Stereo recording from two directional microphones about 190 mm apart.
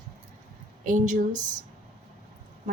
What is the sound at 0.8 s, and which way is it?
Speech, 40° right (ahead or behind).